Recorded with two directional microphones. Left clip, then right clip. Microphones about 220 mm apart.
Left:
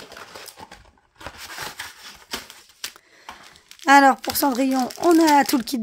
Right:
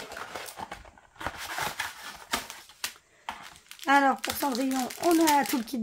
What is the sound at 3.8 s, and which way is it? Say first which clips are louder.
Speech: left 9 dB; 45° left (ahead or behind).